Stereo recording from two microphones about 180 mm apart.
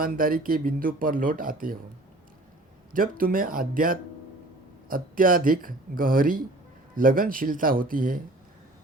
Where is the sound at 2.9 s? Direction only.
50° right (ahead or behind).